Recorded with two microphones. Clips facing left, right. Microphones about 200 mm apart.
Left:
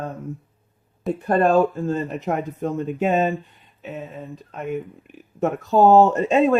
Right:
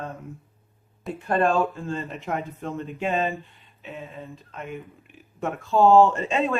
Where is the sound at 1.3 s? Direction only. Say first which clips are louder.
Left 5 dB; 40° left (ahead or behind).